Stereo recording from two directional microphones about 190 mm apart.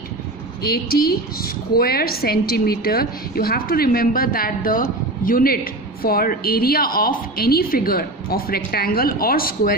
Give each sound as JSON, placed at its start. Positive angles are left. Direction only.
{"t": 0.6, "sound": "a woman's voice", "side_deg": 55}